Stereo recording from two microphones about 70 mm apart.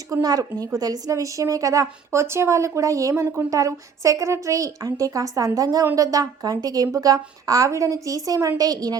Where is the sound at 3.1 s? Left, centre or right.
Right.